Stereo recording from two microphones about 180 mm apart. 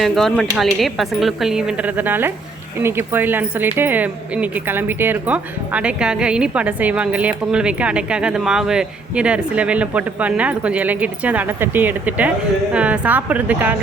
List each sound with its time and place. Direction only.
0.0 s speech: centre (ahead or behind)